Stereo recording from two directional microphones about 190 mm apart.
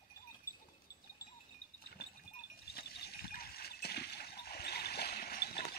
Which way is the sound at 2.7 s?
55° left (ahead or behind).